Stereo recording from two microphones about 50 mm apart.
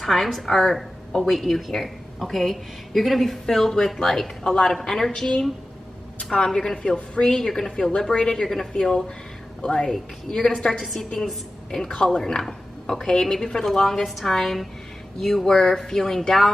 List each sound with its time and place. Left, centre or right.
0.0 s a woman's voice: centre
9.8 s a woman's voice: centre
11.9 s a woman's voice: centre